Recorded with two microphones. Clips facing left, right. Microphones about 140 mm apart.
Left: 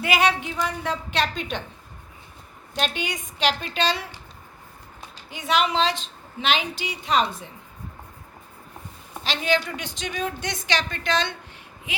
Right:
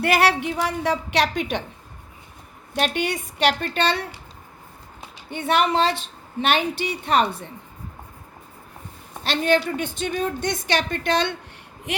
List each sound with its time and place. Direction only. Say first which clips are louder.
0.0 s a woman's voice: right 3 dB; 65° right (ahead or behind)
2.7 s a woman's voice: right 4 dB; 60° right (ahead or behind)
5.3 s a woman's voice: right 3 dB; 60° right (ahead or behind)
9.2 s a woman's voice: right 4 dB; 55° right (ahead or behind)